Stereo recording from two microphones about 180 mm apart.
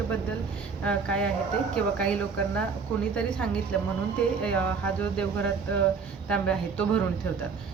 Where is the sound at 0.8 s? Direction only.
5° left (ahead or behind).